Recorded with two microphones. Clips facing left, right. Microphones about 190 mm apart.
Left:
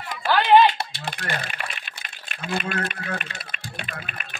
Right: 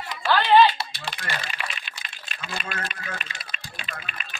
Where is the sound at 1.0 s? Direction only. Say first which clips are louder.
Left 3 dB; 55° left (ahead or behind).